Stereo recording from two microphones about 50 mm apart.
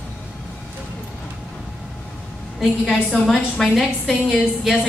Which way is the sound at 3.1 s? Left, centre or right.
Centre.